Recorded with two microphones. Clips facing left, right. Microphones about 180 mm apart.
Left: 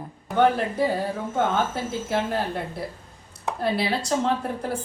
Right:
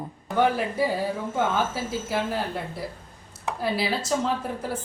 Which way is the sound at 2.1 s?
Centre (ahead or behind).